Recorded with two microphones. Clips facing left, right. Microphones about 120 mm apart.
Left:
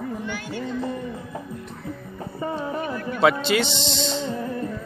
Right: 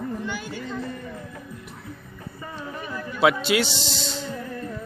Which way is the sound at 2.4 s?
30° left (ahead or behind).